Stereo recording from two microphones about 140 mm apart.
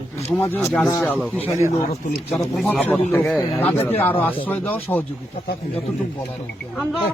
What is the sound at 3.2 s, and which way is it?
Speech, 5° left (ahead or behind).